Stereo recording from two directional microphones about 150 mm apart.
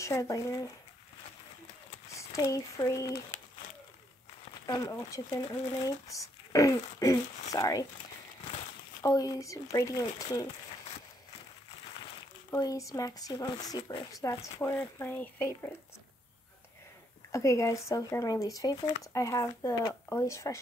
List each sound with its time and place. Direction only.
0.0 s speech: 20° left (ahead or behind)
2.1 s speech: 20° left (ahead or behind)
4.6 s speech: 25° left (ahead or behind)
9.0 s speech: 25° left (ahead or behind)
12.4 s speech: 20° left (ahead or behind)
17.3 s speech: 20° left (ahead or behind)